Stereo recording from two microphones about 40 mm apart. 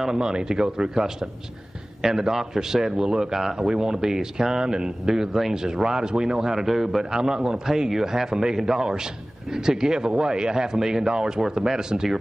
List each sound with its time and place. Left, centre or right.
0.0 s speech: centre